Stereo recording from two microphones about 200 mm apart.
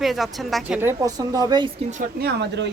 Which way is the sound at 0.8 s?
15° right (ahead or behind).